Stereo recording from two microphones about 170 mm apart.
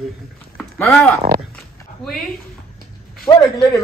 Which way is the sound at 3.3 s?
20° left (ahead or behind).